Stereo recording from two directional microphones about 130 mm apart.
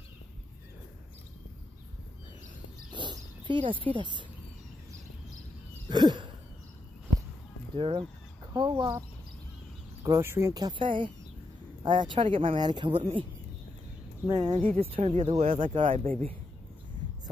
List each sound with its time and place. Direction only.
2.9 s a sound: 35° right (ahead or behind)
3.8 s speech: 40° right (ahead or behind)
5.9 s a sound: 35° right (ahead or behind)
7.7 s speech: 45° right (ahead or behind)
10.0 s speech: 20° right (ahead or behind)
10.5 s speech: 35° right (ahead or behind)
14.2 s speech: 30° right (ahead or behind)
14.8 s speech: 50° right (ahead or behind)